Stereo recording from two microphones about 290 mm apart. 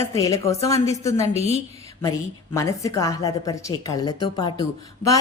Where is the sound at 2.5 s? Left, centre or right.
Centre.